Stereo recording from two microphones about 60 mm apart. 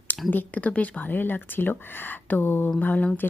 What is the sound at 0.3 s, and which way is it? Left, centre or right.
A woman's voice, left.